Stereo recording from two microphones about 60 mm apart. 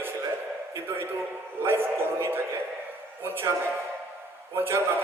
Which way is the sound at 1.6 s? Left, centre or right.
Right.